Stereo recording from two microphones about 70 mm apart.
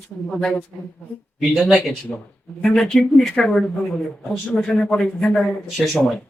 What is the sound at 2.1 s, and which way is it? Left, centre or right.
Speech, left.